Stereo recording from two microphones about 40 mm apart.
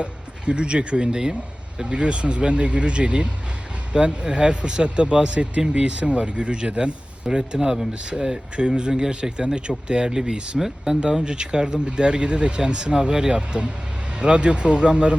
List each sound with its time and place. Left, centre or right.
0.0 s speech: right